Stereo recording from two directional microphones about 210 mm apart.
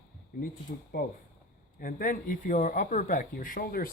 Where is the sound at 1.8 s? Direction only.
45° left (ahead or behind).